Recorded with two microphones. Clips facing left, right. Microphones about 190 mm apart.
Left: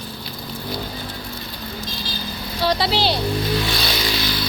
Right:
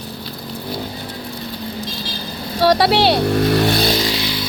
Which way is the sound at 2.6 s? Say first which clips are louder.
Right 6 dB; 65° right (ahead or behind).